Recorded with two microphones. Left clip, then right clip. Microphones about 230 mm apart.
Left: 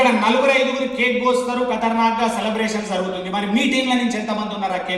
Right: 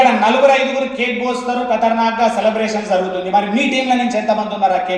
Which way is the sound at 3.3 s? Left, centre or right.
Left.